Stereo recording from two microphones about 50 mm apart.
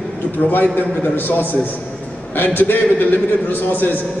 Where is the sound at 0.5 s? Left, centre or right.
Left.